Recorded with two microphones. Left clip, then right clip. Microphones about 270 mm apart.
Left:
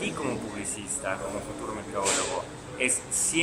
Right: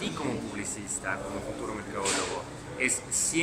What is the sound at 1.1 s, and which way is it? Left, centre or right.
Speech, centre.